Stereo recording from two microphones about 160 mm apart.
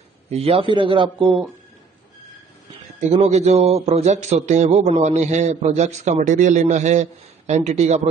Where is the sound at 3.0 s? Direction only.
45° right (ahead or behind).